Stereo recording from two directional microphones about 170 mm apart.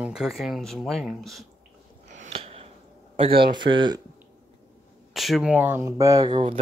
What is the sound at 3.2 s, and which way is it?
Speech, 30° right (ahead or behind).